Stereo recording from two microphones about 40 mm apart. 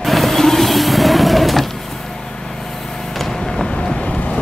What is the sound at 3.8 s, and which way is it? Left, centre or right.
Vehicle, left.